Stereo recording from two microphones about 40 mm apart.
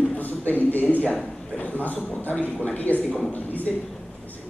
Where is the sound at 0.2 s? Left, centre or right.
Left.